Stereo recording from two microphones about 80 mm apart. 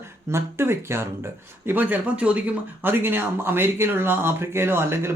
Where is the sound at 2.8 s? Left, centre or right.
Right.